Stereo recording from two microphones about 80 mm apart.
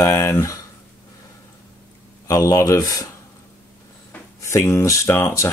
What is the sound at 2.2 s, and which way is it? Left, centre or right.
Speech, left.